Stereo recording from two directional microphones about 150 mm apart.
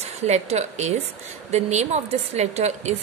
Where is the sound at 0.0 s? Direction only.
45° right (ahead or behind).